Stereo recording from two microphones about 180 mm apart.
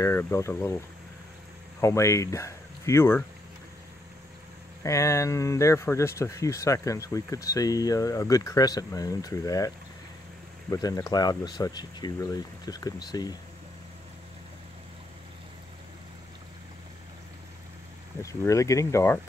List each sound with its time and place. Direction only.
0.0 s speech: 15° left (ahead or behind)
4.8 s speech: 15° left (ahead or behind)
10.7 s speech: 20° left (ahead or behind)
18.2 s speech: 15° left (ahead or behind)